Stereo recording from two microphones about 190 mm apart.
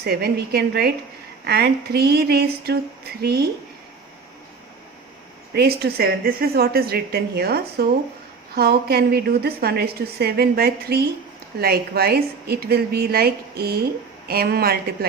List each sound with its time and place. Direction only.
0.0 s a woman's voice: 55° right (ahead or behind)
5.5 s a woman's voice: 55° right (ahead or behind)